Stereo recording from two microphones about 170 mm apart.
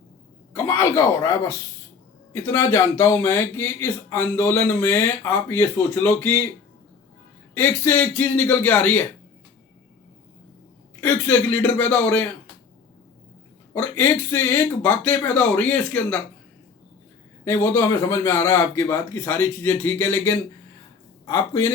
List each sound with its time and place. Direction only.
0.5 s speech: 15° left (ahead or behind)
7.5 s speech: 10° left (ahead or behind)
11.0 s speech: 10° left (ahead or behind)
13.7 s speech: 10° left (ahead or behind)
17.4 s speech: 15° left (ahead or behind)